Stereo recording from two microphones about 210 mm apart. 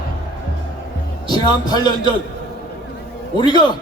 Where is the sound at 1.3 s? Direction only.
20° left (ahead or behind).